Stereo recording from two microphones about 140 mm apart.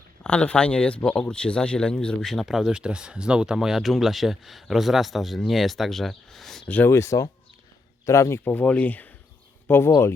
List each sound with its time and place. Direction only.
0.2 s speech: 10° left (ahead or behind)